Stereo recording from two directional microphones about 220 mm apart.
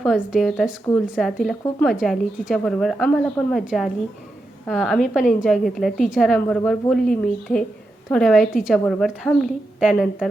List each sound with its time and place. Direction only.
0.0 s a woman's voice: centre (ahead or behind)